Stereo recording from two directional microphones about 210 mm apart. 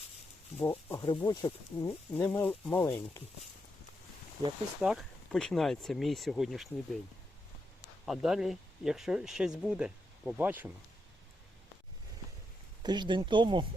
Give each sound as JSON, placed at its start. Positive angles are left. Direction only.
{"t": 0.6, "sound": "speech", "side_deg": 10}
{"t": 4.8, "sound": "speech", "side_deg": 0}
{"t": 8.0, "sound": "speech", "side_deg": 0}
{"t": 12.8, "sound": "speech", "side_deg": -20}